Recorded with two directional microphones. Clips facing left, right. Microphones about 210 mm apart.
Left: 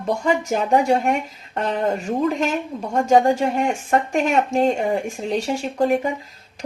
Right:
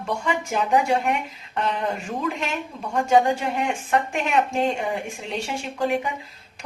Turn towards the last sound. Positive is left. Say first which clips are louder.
# left 5 dB
turn(degrees=40)  # may be behind; listen again after turning